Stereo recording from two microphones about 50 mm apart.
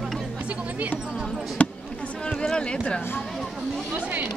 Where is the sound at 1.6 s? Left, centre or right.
Left.